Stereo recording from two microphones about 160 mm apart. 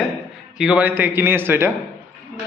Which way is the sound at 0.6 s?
5° right (ahead or behind).